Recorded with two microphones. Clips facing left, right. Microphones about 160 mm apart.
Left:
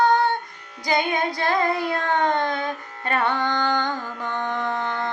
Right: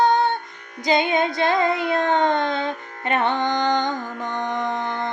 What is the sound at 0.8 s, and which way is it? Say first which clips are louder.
Child singing: right 3 dB; 20° right (ahead or behind).